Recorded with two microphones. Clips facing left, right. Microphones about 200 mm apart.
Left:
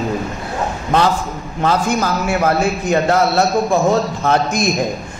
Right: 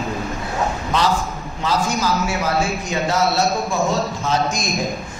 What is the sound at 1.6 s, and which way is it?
A man's voice, 55° left (ahead or behind).